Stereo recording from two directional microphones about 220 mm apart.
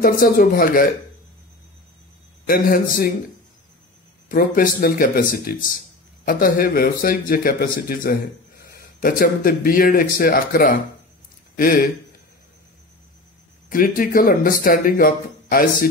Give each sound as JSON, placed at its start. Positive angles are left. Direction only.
{"t": 0.0, "sound": "speech", "side_deg": 40}
{"t": 2.4, "sound": "speech", "side_deg": 40}
{"t": 4.3, "sound": "speech", "side_deg": 40}
{"t": 13.7, "sound": "speech", "side_deg": 40}